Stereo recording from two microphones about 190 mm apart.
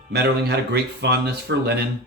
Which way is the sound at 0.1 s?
60° right (ahead or behind).